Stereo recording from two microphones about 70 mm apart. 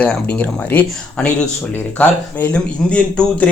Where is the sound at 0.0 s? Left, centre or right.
Left.